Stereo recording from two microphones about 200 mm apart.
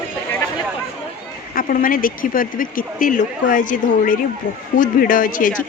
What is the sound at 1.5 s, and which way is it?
Speech, 45° left (ahead or behind).